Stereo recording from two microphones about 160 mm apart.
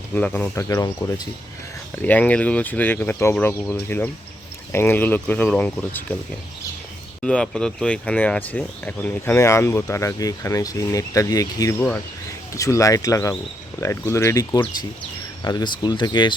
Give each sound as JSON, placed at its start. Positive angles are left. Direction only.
{"t": 0.1, "sound": "speech", "side_deg": 10}
{"t": 2.0, "sound": "speech", "side_deg": 10}
{"t": 7.2, "sound": "speech", "side_deg": 5}